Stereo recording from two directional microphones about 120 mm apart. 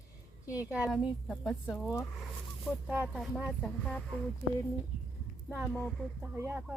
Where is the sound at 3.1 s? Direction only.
Centre (ahead or behind).